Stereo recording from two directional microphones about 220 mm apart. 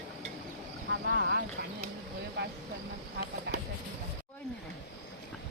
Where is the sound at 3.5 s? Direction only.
50° right (ahead or behind).